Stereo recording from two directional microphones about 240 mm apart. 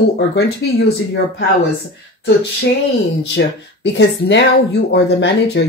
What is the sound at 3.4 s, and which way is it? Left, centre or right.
Speech, left.